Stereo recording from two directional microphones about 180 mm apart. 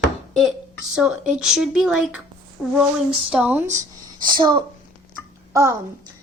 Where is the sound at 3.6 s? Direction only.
40° right (ahead or behind).